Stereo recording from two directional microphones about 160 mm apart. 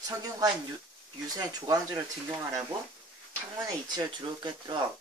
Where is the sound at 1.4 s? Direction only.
25° right (ahead or behind).